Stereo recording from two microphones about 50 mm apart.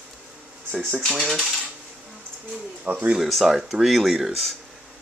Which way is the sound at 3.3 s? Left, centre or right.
Centre.